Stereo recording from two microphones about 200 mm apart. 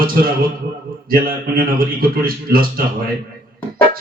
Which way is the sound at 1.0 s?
45° right (ahead or behind).